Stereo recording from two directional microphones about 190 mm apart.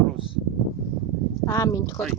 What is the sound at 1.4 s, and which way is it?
Speech, 15° left (ahead or behind).